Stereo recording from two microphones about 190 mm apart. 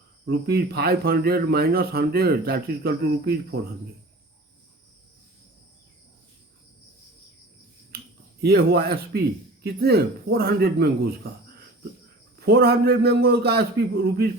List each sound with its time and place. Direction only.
0.3 s speech: 55° right (ahead or behind)
8.4 s speech: 55° right (ahead or behind)